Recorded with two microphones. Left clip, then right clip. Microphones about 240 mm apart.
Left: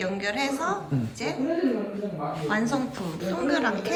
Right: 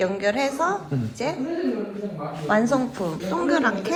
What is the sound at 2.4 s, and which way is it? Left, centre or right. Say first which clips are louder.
A woman's voice: right 7 dB; centre.